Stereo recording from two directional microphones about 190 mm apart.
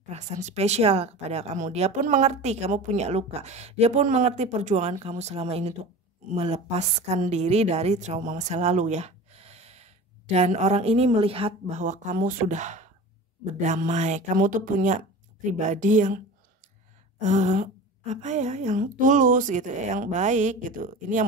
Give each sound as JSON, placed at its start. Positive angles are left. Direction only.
{"t": 0.1, "sound": "a woman's voice", "side_deg": -35}
{"t": 17.2, "sound": "a woman's voice", "side_deg": -40}